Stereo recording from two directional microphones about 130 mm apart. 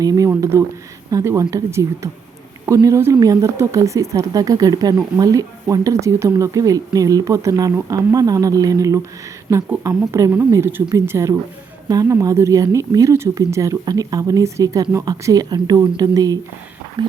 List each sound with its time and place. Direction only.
0.0 s speech: 25° right (ahead or behind)